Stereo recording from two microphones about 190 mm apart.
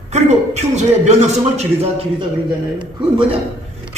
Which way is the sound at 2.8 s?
25° right (ahead or behind).